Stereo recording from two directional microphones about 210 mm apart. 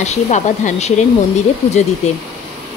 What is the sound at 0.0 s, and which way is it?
A woman's voice, 35° left (ahead or behind).